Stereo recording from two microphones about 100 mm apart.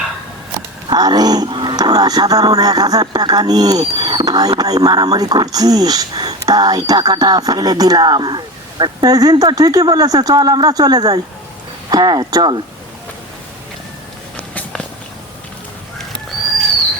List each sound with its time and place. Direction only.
0.9 s speech: 45° right (ahead or behind)